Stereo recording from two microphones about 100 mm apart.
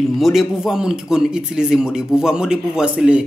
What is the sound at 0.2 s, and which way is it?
Speech, centre (ahead or behind).